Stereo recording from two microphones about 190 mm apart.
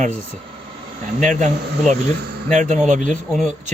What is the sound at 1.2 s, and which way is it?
Speech, 40° right (ahead or behind).